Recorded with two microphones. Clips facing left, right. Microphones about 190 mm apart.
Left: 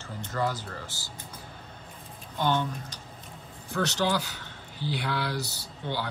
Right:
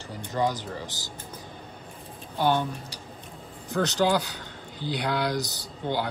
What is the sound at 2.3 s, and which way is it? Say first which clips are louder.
Speech: right 3 dB; 10° right (ahead or behind).